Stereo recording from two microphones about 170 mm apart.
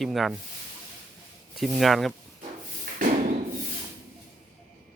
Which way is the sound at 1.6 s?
Centre (ahead or behind).